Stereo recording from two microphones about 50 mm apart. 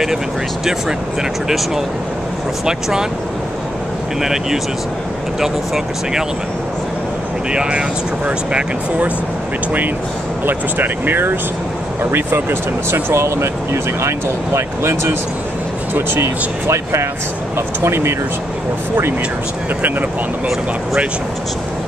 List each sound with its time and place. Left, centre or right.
2.6 s speech: centre
4.2 s speech: centre
8.3 s speech: right
10.4 s speech: right
13.1 s speech: right
15.9 s speech: right